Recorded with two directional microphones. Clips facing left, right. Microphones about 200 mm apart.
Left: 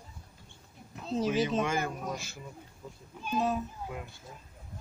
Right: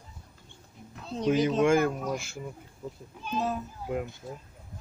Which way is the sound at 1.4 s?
Centre (ahead or behind).